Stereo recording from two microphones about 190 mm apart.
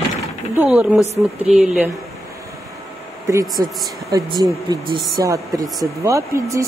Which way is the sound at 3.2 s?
15° right (ahead or behind).